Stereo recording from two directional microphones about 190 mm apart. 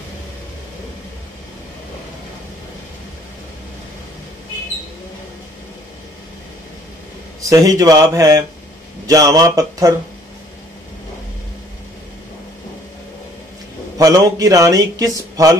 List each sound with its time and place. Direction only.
7.4 s speech: 20° right (ahead or behind)
13.9 s speech: 20° right (ahead or behind)